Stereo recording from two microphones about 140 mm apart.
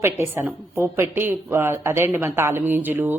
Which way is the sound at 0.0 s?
15° right (ahead or behind).